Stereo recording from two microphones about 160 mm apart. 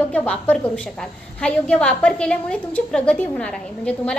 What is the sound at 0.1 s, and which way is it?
A woman's voice, 10° left (ahead or behind).